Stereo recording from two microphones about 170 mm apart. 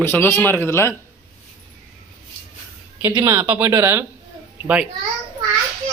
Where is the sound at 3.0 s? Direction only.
20° right (ahead or behind).